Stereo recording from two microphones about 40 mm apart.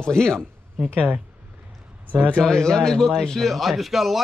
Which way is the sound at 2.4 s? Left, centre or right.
Centre.